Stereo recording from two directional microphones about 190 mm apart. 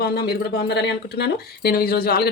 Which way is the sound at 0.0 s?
55° left (ahead or behind).